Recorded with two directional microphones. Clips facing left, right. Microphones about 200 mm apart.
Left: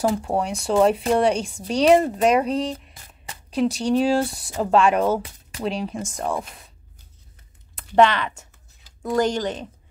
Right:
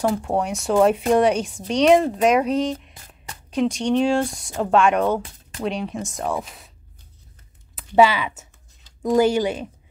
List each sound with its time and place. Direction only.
0.0 s speech: centre (ahead or behind)
7.7 s speech: 5° right (ahead or behind)